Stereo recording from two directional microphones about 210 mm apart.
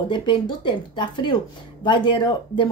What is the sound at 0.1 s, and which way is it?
Speech, 20° left (ahead or behind).